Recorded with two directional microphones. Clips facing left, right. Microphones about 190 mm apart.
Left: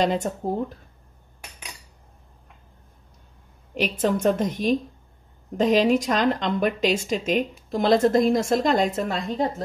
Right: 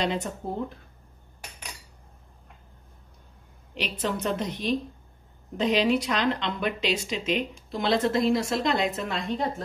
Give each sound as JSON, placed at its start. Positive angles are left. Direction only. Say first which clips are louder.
{"t": 0.0, "sound": "speech", "louder": "left 5 dB", "side_deg": 45}
{"t": 3.7, "sound": "speech", "louder": "left 7 dB", "side_deg": 45}